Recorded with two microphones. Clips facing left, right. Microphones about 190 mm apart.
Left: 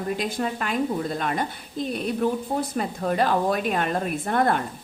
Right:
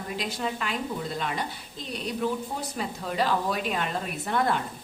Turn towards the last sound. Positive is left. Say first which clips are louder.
# left 4 dB
turn(degrees=50)  # may be behind; listen again after turning